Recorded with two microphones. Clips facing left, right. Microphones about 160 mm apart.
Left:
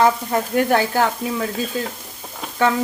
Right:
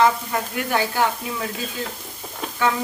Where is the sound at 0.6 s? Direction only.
40° left (ahead or behind).